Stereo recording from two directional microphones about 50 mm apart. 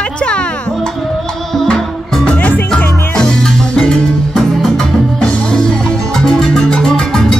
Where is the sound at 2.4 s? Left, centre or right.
Left.